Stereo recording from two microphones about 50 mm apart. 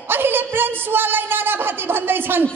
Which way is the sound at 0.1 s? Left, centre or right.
Right.